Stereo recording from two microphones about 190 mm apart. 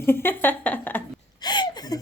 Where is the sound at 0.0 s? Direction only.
10° left (ahead or behind).